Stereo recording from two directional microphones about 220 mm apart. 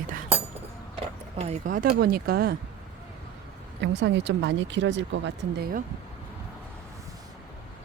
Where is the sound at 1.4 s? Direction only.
30° right (ahead or behind).